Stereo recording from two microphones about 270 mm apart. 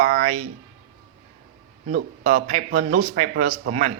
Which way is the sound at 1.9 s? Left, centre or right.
Right.